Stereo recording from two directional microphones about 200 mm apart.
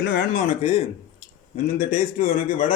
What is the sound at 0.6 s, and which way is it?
A man's voice, 30° left (ahead or behind).